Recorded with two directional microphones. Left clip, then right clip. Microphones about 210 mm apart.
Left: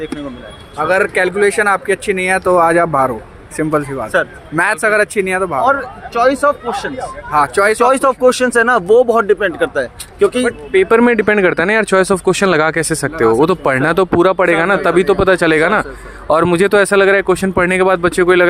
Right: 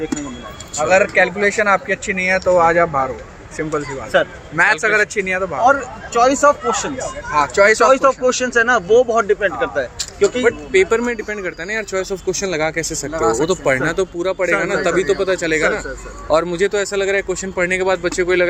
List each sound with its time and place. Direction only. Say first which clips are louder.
0.8 s speech: even; 55° left (ahead or behind)
6.1 s speech: even; 15° left (ahead or behind)
7.3 s speech: left 1 dB; 55° left (ahead or behind)